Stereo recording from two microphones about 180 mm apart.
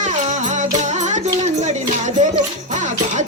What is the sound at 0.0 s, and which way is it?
Music, 40° right (ahead or behind).